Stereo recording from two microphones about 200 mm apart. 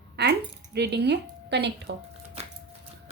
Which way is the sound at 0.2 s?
55° right (ahead or behind).